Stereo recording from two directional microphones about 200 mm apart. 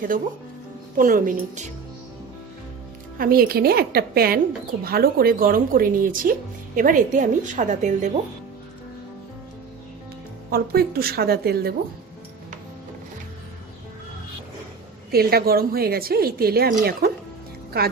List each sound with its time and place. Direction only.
0.9 s a woman's voice: 45° right (ahead or behind)
3.2 s a woman's voice: 45° right (ahead or behind)
10.5 s a woman's voice: 50° right (ahead or behind)
15.1 s a woman's voice: 50° right (ahead or behind)